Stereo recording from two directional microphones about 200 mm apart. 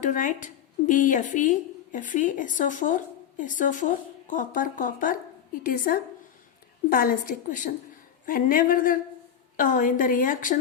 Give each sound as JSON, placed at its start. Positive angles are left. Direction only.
{"t": 0.0, "sound": "a woman's voice", "side_deg": 40}